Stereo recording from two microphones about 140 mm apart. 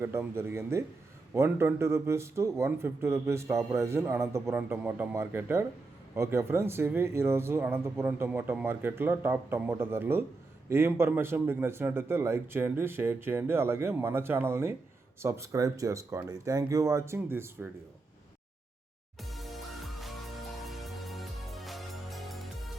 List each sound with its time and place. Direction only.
0.0 s a man's voice: 15° right (ahead or behind)
19.2 s music: centre (ahead or behind)